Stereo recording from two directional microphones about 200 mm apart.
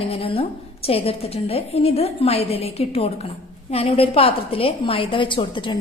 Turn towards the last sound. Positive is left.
turn(degrees=25)  # may be behind; listen again after turning